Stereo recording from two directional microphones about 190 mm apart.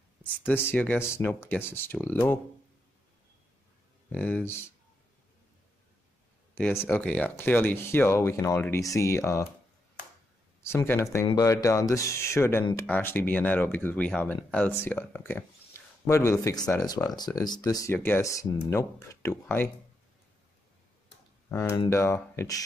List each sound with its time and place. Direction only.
0.5 s speech: 10° left (ahead or behind)
4.1 s speech: 5° left (ahead or behind)
6.5 s speech: 10° left (ahead or behind)
10.6 s speech: 15° left (ahead or behind)
21.5 s speech: 15° left (ahead or behind)